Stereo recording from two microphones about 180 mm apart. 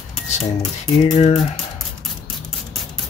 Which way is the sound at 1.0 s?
35° left (ahead or behind).